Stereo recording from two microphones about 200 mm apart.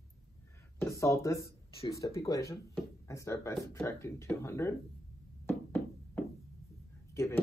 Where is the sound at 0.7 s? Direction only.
15° left (ahead or behind).